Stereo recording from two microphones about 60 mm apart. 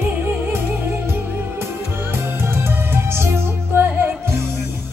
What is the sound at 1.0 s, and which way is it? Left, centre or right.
Music, right.